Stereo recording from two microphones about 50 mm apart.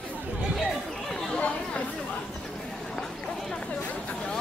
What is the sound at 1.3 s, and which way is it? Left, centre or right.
Chatter, left.